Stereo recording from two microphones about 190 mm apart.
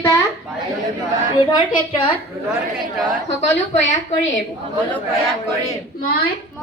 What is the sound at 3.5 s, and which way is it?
Speech, 35° left (ahead or behind).